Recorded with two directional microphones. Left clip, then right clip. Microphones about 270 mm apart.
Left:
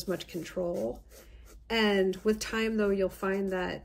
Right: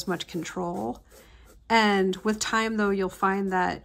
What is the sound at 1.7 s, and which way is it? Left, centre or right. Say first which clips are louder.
Speech: right 5 dB; centre.